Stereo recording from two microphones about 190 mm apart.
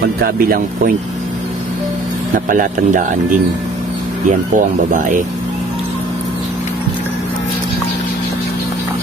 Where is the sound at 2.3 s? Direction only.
45° right (ahead or behind).